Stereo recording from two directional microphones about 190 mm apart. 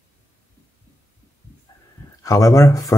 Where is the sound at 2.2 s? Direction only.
15° left (ahead or behind).